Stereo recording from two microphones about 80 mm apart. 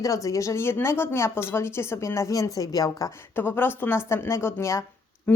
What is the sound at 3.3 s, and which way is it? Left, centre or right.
Speech, left.